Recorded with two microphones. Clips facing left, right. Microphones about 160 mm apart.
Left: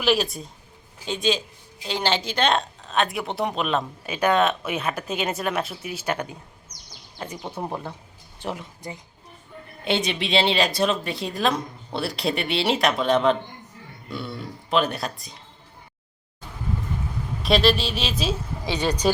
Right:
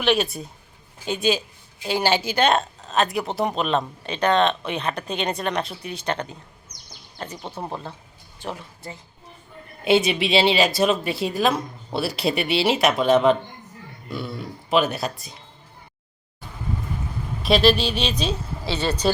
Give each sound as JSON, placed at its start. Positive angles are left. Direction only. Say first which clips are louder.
{"t": 0.0, "sound": "speech", "louder": "right 1 dB", "side_deg": 0}
{"t": 9.8, "sound": "speech", "louder": "right 6 dB", "side_deg": -5}
{"t": 17.4, "sound": "speech", "louder": "right 2 dB", "side_deg": 0}
{"t": 18.6, "sound": "speech", "louder": "even", "side_deg": 15}